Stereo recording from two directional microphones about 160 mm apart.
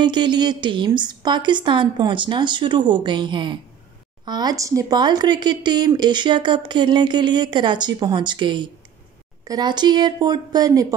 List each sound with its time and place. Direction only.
0.0 s speech: 30° right (ahead or behind)